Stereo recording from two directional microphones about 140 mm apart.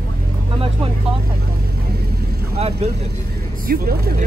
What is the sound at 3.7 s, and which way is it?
Speech, 90° right.